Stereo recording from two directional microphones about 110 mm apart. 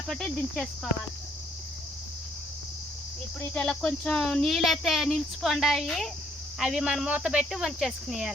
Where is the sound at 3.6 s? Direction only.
10° left (ahead or behind).